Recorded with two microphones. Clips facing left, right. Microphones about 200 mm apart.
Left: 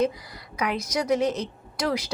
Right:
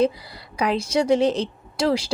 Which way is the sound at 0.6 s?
30° right (ahead or behind).